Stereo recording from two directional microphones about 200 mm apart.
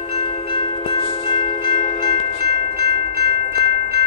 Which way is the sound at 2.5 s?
50° right (ahead or behind).